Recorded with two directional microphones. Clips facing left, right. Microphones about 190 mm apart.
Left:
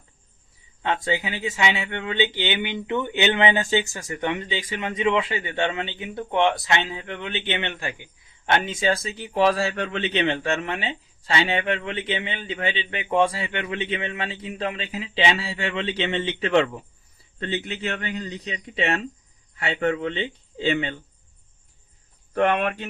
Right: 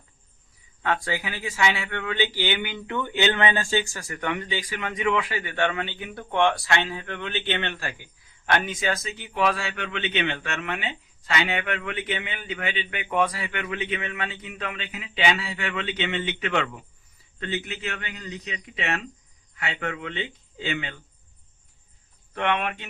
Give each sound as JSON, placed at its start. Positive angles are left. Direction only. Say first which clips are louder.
{"t": 0.8, "sound": "a man's voice", "louder": "left 2 dB", "side_deg": 20}
{"t": 22.4, "sound": "a man's voice", "louder": "left 5 dB", "side_deg": 40}